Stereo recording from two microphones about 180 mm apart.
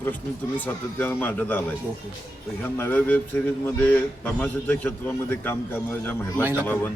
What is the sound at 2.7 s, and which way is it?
Speech, 10° left (ahead or behind).